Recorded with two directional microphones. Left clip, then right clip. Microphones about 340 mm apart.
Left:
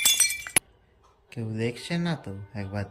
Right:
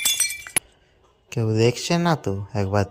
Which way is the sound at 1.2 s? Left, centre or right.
Centre.